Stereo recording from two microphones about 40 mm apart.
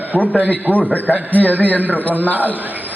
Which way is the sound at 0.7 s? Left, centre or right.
Left.